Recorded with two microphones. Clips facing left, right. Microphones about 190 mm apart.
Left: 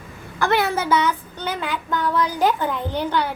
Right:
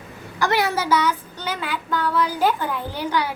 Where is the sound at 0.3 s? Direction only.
55° left (ahead or behind).